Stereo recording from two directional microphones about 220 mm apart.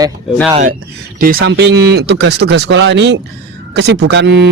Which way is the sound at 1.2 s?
40° right (ahead or behind).